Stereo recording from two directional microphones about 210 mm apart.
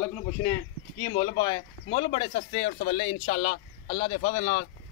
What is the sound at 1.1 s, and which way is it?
Speech, 20° left (ahead or behind).